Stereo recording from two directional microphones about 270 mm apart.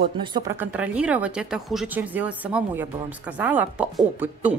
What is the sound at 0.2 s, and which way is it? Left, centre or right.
Speech, centre.